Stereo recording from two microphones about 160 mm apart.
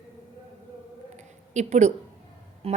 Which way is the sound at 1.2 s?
45° right (ahead or behind).